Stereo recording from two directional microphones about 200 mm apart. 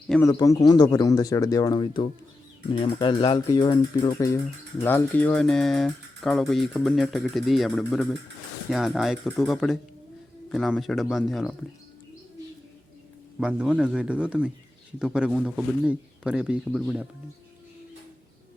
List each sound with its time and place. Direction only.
0.1 s speech: 5° left (ahead or behind)
0.3 s speech: 20° left (ahead or behind); by 11.5 s centre (ahead or behind)
13.4 s speech: 5° right (ahead or behind)